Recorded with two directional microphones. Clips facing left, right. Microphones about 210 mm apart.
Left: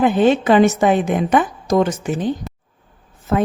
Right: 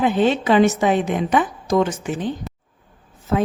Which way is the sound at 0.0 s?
50° left (ahead or behind).